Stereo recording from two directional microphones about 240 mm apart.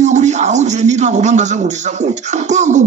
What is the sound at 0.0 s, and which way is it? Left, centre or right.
A man's voice, right.